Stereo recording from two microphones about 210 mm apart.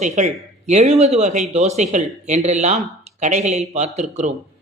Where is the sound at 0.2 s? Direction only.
35° right (ahead or behind).